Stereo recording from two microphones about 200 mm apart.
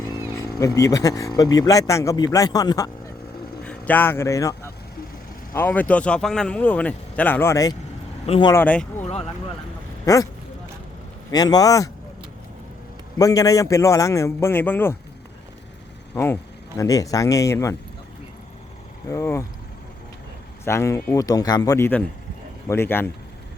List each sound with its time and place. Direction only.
0.6 s speech: 15° left (ahead or behind)
3.6 s a man's voice: 5° left (ahead or behind); by 8.5 s 25° left (ahead or behind)
8.5 s speech: 5° left (ahead or behind)
9.0 s vehicle: 35° left (ahead or behind)
10.1 s speech: 20° left (ahead or behind)
11.3 s a man's voice: 20° left (ahead or behind)
13.1 s speech: 15° left (ahead or behind)
16.1 s speech: 10° left (ahead or behind)
19.0 s speech: 15° left (ahead or behind)
20.7 s speech: 15° left (ahead or behind)